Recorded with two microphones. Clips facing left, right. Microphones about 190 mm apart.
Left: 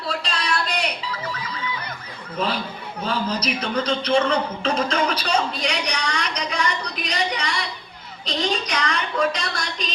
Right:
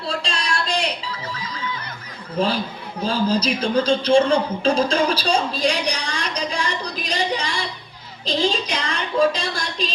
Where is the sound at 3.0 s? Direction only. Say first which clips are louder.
Right 5 dB; 30° right (ahead or behind).